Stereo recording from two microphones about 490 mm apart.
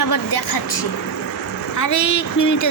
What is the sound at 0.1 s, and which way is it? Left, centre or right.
Speech, left.